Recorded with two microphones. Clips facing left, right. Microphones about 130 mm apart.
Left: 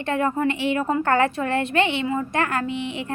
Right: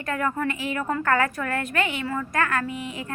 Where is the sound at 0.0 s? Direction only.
25° left (ahead or behind).